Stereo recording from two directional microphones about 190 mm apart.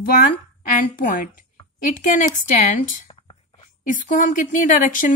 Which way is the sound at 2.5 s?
40° left (ahead or behind).